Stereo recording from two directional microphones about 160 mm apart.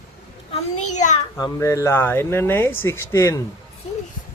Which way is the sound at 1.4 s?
20° left (ahead or behind).